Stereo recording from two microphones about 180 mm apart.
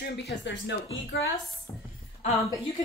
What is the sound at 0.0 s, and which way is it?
Speech, 70° left (ahead or behind).